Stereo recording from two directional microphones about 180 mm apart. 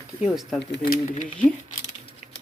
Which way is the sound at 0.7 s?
55° left (ahead or behind).